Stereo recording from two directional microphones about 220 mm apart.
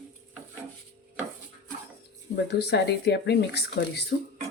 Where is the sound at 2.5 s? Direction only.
50° left (ahead or behind).